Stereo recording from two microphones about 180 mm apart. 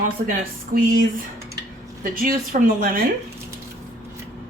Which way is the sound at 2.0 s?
50° right (ahead or behind).